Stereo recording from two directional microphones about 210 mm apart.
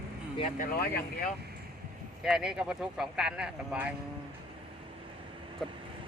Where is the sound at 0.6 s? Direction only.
45° left (ahead or behind).